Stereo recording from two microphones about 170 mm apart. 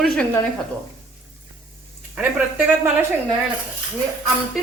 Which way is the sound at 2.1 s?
10° right (ahead or behind).